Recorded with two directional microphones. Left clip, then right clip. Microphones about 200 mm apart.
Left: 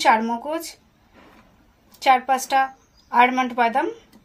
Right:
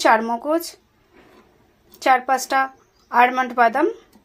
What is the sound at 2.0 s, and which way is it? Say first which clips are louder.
A woman's voice: even; 25° right (ahead or behind).